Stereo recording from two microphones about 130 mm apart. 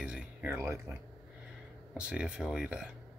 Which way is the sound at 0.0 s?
10° right (ahead or behind).